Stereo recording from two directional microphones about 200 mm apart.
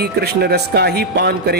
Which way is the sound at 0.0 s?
50° right (ahead or behind).